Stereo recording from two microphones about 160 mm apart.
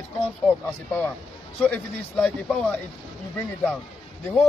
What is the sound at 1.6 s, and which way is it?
A man's voice, 10° left (ahead or behind).